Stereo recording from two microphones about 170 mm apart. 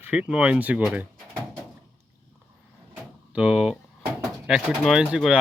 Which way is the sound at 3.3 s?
5° right (ahead or behind).